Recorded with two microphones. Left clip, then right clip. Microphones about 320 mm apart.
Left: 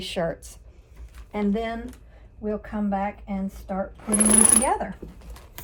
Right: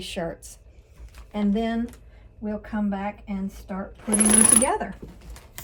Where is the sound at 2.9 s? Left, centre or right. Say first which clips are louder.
Left 4 dB; centre.